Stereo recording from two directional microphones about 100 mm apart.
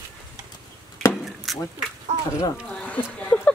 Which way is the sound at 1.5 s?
Centre (ahead or behind).